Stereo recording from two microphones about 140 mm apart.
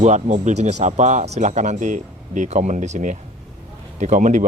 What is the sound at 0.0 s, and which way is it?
Speech, 55° right (ahead or behind).